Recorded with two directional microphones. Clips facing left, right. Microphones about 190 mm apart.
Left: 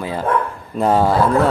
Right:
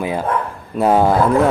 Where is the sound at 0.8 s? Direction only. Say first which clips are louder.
Right 2 dB; 10° right (ahead or behind).